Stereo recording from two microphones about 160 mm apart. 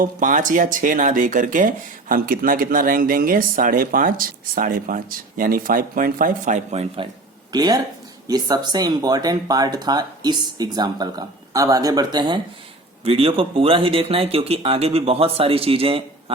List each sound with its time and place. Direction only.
0.0 s speech: 55° right (ahead or behind)
7.5 s speech: 25° right (ahead or behind)